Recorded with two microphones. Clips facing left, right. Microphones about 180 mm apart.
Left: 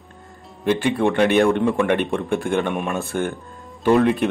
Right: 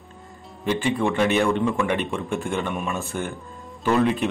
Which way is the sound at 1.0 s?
60° left (ahead or behind).